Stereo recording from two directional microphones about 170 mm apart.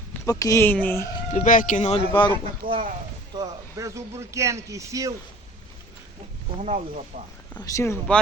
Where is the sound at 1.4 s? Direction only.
50° left (ahead or behind).